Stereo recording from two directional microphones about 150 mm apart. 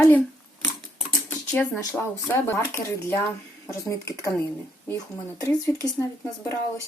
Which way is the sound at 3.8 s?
20° left (ahead or behind).